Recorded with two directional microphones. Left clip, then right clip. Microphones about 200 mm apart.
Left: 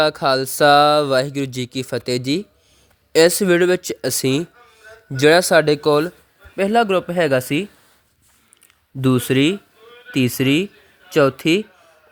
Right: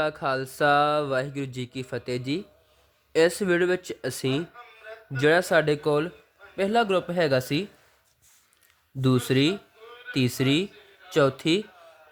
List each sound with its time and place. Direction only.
0.0 s speech: 25° left (ahead or behind)
9.0 s speech: 20° left (ahead or behind)